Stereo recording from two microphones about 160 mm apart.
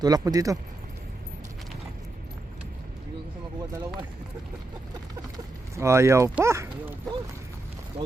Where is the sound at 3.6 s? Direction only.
15° right (ahead or behind).